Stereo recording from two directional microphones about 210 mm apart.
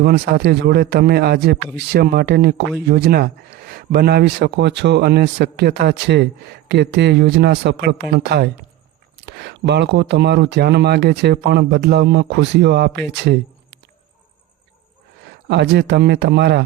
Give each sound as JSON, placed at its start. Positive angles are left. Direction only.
{"t": 0.0, "sound": "speech", "side_deg": -50}
{"t": 15.4, "sound": "speech", "side_deg": -55}